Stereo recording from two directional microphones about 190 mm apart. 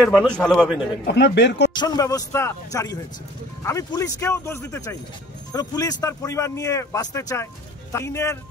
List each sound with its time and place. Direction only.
0.0 s a man's voice: centre (ahead or behind)
1.0 s speech: 65° left (ahead or behind)
1.7 s speech: 20° left (ahead or behind)